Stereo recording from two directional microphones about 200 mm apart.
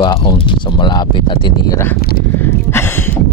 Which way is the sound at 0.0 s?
25° left (ahead or behind).